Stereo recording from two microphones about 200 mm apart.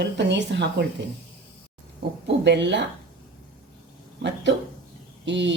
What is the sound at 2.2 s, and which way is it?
Speech, 60° right (ahead or behind).